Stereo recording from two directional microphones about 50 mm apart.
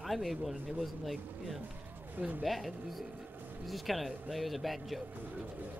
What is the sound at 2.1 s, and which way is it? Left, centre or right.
Speech, right.